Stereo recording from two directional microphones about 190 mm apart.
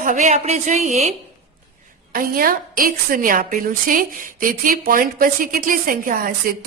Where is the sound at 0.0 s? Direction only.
40° right (ahead or behind).